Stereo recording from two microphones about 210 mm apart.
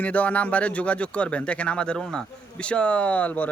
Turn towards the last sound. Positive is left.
turn(degrees=5)  # may be behind; listen again after turning